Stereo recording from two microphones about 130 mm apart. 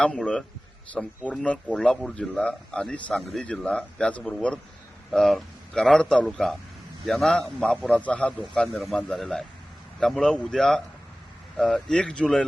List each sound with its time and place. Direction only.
0.0 s speech: 5° left (ahead or behind)